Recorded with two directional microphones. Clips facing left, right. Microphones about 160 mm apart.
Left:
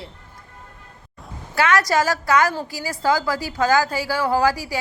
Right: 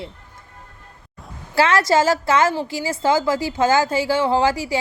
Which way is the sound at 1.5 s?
30° right (ahead or behind).